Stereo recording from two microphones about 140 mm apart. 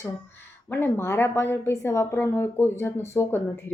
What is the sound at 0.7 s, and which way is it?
A woman's voice, 15° left (ahead or behind).